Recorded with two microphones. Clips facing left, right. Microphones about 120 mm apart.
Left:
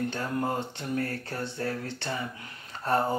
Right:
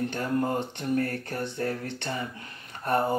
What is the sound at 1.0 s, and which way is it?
Speech, 20° right (ahead or behind).